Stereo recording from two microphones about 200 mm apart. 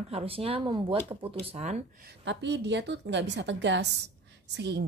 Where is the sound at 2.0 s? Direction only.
60° right (ahead or behind).